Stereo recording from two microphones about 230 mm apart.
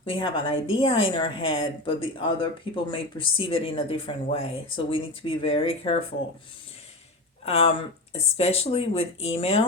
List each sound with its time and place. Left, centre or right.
0.0 s speech: left
7.4 s speech: left